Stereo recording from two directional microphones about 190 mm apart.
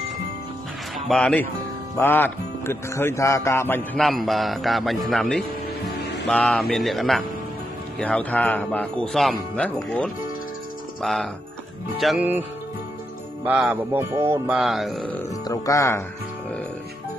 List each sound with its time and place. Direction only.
0.9 s speech: centre (ahead or behind)
13.4 s music: 5° right (ahead or behind)
14.6 s speech: centre (ahead or behind)
15.4 s speech: 20° left (ahead or behind)